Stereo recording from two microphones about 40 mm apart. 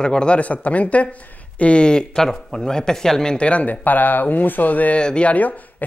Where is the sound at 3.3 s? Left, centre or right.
Left.